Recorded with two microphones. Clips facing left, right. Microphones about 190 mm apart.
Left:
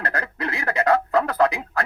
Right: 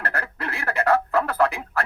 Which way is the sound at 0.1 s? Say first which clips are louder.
Left 3 dB; 15° left (ahead or behind).